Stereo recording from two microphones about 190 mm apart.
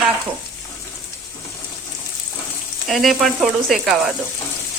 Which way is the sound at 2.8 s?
Centre (ahead or behind).